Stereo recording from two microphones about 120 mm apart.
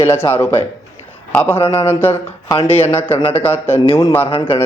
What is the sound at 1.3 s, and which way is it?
Speech, 20° left (ahead or behind).